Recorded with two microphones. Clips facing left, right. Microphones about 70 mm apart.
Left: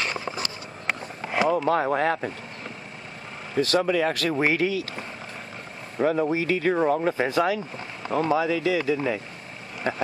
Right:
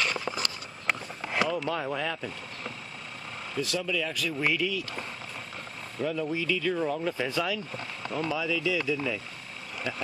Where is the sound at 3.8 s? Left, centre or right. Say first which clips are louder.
Left 8 dB; left.